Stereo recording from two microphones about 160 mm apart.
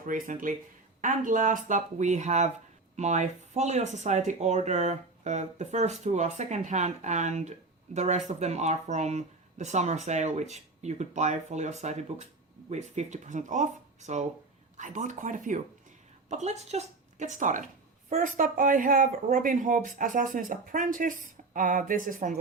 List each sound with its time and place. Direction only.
0.0 s speech: 55° right (ahead or behind)